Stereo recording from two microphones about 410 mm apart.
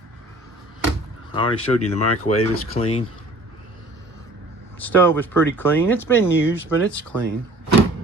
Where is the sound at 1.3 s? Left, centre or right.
Centre.